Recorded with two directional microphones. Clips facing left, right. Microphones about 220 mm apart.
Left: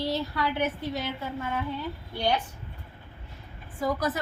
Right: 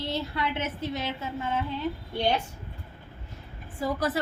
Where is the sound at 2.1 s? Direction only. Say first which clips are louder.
Even; 25° right (ahead or behind).